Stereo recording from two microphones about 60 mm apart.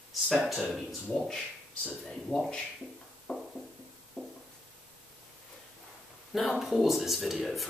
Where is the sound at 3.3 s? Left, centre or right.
Left.